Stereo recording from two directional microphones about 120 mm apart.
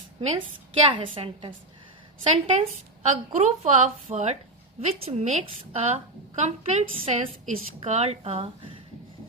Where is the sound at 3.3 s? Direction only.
70° right (ahead or behind).